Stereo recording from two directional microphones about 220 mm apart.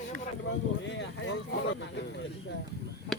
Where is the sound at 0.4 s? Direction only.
55° left (ahead or behind).